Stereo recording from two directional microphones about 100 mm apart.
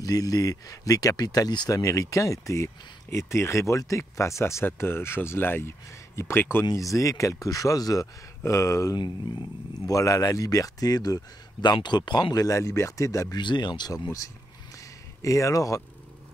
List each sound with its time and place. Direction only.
0.0 s speech: 40° left (ahead or behind)
6.6 s speech: 35° left (ahead or behind)
13.4 s speech: 50° left (ahead or behind)
15.2 s speech: 35° left (ahead or behind)